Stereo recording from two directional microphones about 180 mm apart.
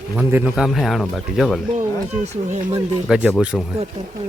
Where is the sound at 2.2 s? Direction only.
40° right (ahead or behind).